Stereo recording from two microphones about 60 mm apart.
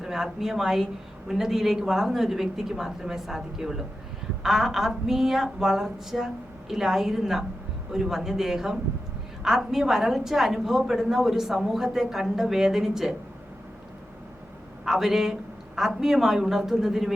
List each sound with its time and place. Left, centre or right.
0.0 s a woman's voice: centre
14.8 s a woman's voice: centre